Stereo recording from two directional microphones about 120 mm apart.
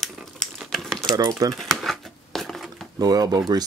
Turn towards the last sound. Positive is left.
turn(degrees=-35)  # may be behind; listen again after turning